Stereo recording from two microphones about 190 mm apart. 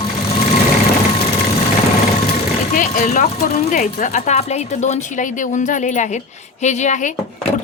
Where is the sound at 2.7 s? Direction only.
45° left (ahead or behind).